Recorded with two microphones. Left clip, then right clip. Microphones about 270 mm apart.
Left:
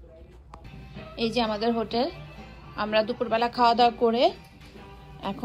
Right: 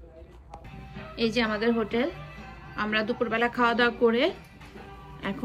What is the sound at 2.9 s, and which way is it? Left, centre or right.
Speech, centre.